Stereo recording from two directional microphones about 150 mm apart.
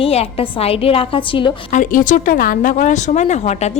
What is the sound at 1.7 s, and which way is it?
Speech, 60° left (ahead or behind).